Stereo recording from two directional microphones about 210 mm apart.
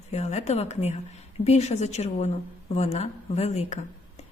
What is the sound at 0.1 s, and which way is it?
Speech, 30° left (ahead or behind).